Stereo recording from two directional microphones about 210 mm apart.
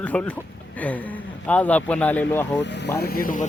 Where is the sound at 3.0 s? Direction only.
45° left (ahead or behind).